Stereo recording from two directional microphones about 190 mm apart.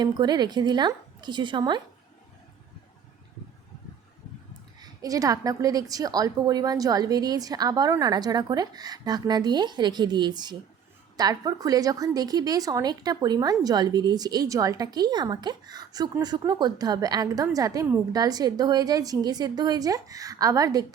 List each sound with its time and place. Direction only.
0.0 s a woman's voice: 20° right (ahead or behind)
4.8 s a woman's voice: 20° right (ahead or behind)